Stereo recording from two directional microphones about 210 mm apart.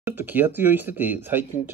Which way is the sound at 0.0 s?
10° right (ahead or behind).